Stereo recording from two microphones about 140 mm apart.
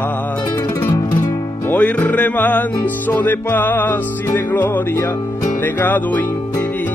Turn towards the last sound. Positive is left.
turn(degrees=15)  # may be behind; listen again after turning